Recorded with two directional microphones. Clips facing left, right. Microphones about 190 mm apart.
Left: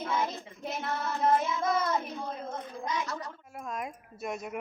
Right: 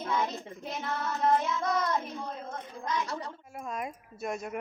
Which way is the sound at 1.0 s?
5° left (ahead or behind).